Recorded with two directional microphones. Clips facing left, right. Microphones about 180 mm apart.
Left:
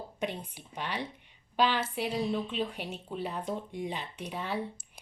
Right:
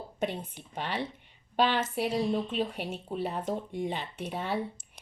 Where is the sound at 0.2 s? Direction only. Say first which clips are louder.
Right 3 dB; 50° right (ahead or behind).